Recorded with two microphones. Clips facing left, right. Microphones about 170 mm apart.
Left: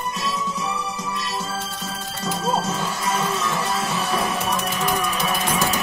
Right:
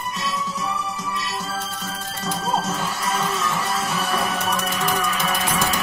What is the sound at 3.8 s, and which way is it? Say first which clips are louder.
Music: left 1 dB; 20° left (ahead or behind).